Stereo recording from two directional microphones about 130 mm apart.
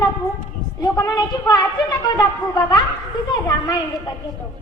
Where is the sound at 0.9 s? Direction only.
30° left (ahead or behind).